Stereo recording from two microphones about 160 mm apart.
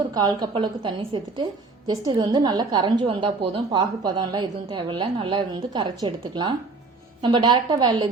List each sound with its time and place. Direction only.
0.1 s a woman's voice: 25° right (ahead or behind)